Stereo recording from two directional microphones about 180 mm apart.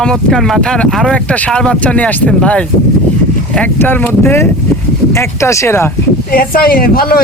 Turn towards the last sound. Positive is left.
turn(degrees=55)  # may be behind; listen again after turning